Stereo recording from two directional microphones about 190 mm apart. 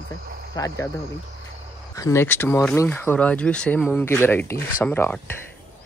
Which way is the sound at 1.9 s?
15° left (ahead or behind).